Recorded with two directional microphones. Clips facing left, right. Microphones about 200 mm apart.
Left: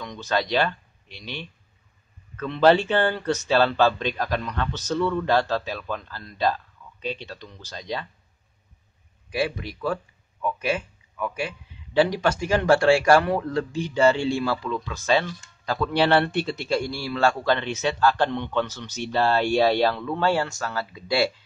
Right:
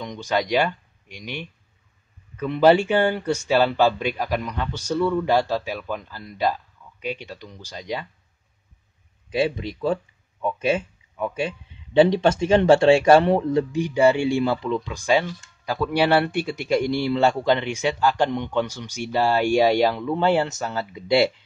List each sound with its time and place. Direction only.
0.0 s speech: 15° right (ahead or behind)
9.3 s speech: 20° right (ahead or behind)